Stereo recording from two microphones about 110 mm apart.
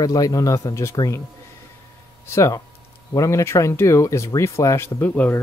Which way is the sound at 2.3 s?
25° left (ahead or behind).